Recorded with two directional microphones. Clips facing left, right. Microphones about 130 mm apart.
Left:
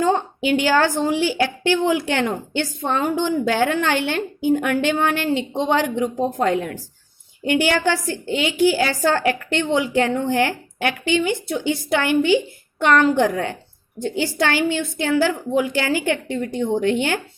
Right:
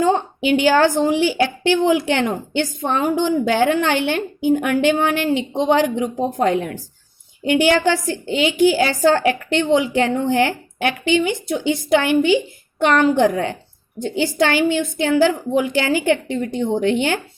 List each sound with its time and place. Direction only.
0.0 s a woman's voice: 20° right (ahead or behind)